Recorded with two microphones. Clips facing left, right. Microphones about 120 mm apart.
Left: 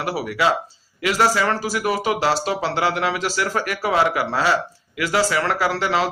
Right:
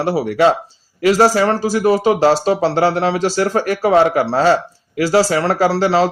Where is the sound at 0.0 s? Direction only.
35° right (ahead or behind).